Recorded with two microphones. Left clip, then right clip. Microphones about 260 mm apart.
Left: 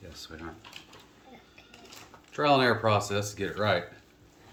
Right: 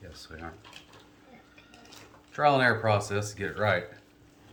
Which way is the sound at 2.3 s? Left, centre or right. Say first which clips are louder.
Right 1 dB; centre.